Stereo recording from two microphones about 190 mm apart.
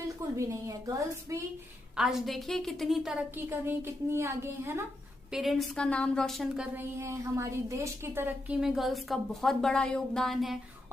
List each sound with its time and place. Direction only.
0.3 s a woman's voice: 15° right (ahead or behind)
2.0 s a woman's voice: centre (ahead or behind)
3.5 s a woman's voice: 15° right (ahead or behind)
5.3 s a woman's voice: centre (ahead or behind)